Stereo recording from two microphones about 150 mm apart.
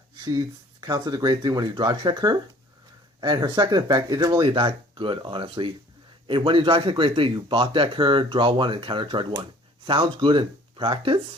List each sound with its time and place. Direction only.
0.3 s speech: 25° right (ahead or behind)